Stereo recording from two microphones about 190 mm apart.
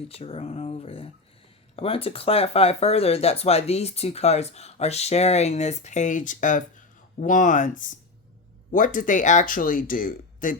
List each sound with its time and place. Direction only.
0.1 s speech: 30° left (ahead or behind)